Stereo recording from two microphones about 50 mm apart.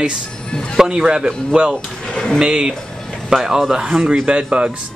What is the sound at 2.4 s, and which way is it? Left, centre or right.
Speech, centre.